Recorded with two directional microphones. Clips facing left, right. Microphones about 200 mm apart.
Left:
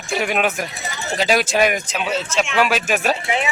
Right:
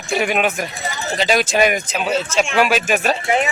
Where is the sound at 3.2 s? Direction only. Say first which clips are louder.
Right 4 dB; 45° right (ahead or behind).